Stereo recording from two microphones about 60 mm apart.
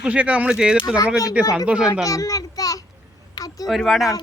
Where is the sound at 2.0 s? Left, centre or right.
Left.